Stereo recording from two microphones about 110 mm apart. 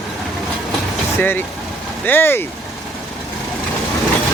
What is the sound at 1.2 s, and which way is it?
Speech, 20° left (ahead or behind).